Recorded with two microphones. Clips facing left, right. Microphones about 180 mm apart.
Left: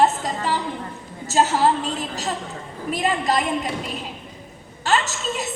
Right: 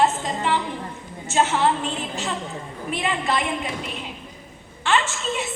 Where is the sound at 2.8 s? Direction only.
40° left (ahead or behind).